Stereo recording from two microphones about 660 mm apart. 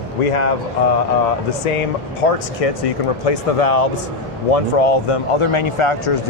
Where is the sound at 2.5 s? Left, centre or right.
Left.